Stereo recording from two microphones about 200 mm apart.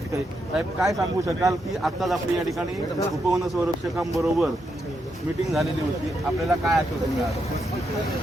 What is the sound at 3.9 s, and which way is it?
Speech, 5° right (ahead or behind).